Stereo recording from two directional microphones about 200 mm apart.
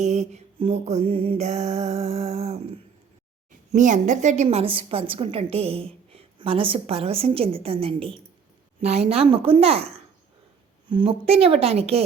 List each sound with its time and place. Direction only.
0.0 s mantra: 35° right (ahead or behind)
3.7 s a woman's voice: 35° right (ahead or behind)